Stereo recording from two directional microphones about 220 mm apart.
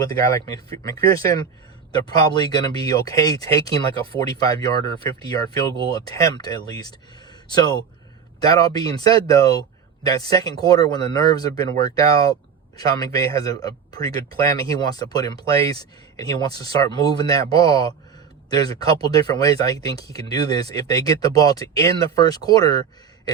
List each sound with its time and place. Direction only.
0.0 s speech: 15° left (ahead or behind)